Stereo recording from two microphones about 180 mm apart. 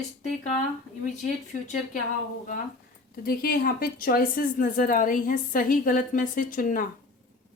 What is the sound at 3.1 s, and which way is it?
A woman's voice, 55° left (ahead or behind).